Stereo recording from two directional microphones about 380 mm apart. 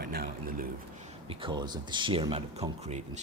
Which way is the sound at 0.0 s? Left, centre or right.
Right.